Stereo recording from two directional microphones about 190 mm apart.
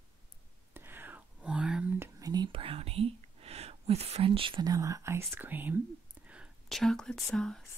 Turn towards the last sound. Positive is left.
turn(degrees=5)  # may be behind; listen again after turning